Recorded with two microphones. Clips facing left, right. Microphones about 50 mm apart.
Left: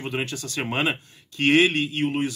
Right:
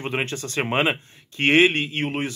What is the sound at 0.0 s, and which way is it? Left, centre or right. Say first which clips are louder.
Speech: right 2 dB; right.